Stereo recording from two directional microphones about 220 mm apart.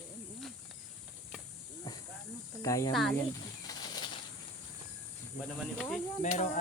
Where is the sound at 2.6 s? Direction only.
15° left (ahead or behind).